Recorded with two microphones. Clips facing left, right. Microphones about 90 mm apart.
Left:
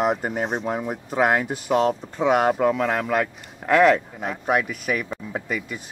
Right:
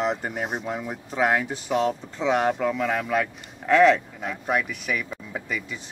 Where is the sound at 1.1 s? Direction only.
45° left (ahead or behind).